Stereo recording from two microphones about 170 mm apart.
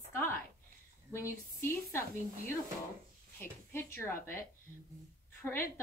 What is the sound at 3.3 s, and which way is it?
A woman's voice, 15° left (ahead or behind).